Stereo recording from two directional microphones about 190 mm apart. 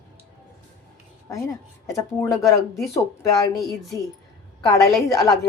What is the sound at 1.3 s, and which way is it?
Speech, 15° left (ahead or behind).